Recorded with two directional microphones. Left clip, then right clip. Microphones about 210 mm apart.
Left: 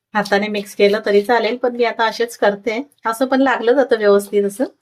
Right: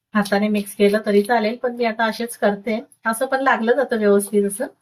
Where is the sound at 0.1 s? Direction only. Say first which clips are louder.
Left 3 dB; 40° left (ahead or behind).